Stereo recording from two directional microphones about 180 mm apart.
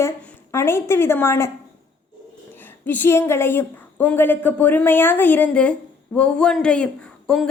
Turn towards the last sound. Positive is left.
turn(degrees=5)  # may be behind; listen again after turning